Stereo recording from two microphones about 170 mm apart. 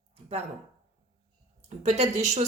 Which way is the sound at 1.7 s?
40° right (ahead or behind).